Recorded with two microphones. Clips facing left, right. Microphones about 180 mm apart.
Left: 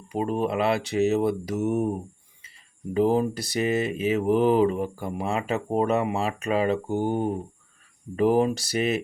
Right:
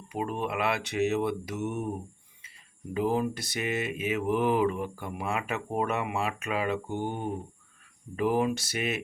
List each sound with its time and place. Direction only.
0.1 s speech: 30° left (ahead or behind)
2.9 s speech: 35° left (ahead or behind)